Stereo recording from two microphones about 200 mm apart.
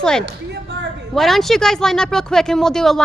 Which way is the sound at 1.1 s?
Centre (ahead or behind).